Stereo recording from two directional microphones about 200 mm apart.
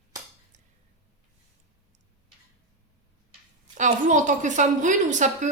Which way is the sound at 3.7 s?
40° right (ahead or behind).